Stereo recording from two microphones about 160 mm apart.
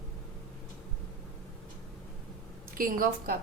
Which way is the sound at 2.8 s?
60° right (ahead or behind).